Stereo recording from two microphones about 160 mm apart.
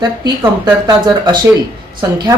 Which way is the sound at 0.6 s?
30° right (ahead or behind).